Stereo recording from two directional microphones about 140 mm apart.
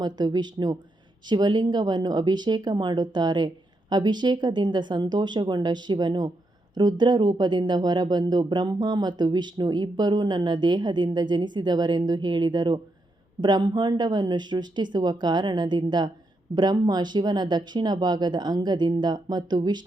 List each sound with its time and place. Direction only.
0.0 s speech: 30° right (ahead or behind)